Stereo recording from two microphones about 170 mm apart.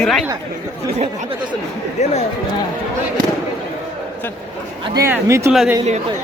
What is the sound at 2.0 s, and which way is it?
Speech, 40° left (ahead or behind).